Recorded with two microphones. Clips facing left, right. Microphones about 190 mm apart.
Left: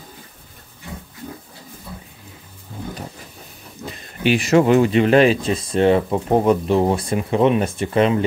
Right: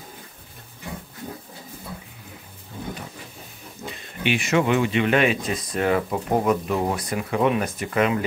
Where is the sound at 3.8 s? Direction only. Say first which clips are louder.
Left 6 dB; 35° left (ahead or behind).